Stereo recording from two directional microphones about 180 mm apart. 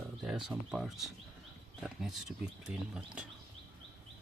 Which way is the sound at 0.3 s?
5° right (ahead or behind).